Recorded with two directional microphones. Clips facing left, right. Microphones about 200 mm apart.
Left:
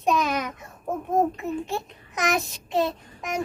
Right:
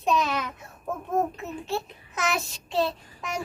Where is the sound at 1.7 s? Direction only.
15° left (ahead or behind).